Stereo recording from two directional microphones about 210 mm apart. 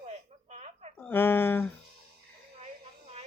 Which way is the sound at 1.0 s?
10° left (ahead or behind).